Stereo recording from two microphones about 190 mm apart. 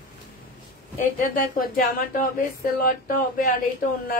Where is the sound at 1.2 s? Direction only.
45° left (ahead or behind).